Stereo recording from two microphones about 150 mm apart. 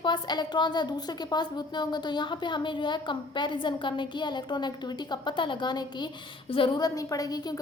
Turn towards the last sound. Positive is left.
turn(degrees=25)  # may be behind; listen again after turning